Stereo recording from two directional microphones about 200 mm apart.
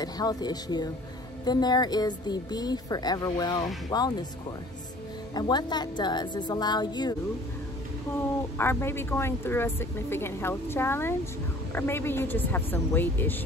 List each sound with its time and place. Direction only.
0.0 s speech: 20° left (ahead or behind)
5.3 s speech: 20° left (ahead or behind)
8.5 s speech: 10° left (ahead or behind)